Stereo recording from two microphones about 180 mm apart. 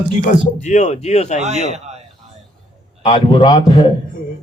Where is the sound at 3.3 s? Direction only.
25° left (ahead or behind).